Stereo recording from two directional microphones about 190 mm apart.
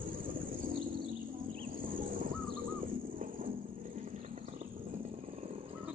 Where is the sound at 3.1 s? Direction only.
45° right (ahead or behind).